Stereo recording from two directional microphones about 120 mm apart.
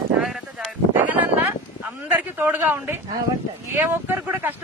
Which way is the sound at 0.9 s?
15° right (ahead or behind).